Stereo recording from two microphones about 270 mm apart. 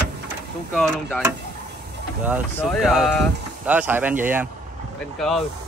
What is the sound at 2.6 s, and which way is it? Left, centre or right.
Speech, centre.